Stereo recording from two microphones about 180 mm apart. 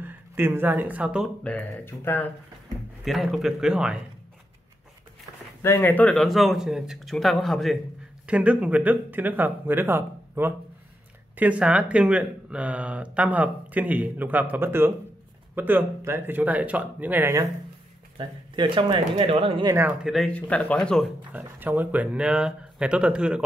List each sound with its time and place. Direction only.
0.0 s speech: 10° right (ahead or behind)
1.4 s speech: 10° left (ahead or behind)
3.1 s a man's voice: centre (ahead or behind)
5.6 s a man's voice: 10° left (ahead or behind); by 17.5 s 15° right (ahead or behind)
18.1 s speech: 30° right (ahead or behind)
19.7 s a man's voice: 10° right (ahead or behind)
21.3 s speech: 10° right (ahead or behind)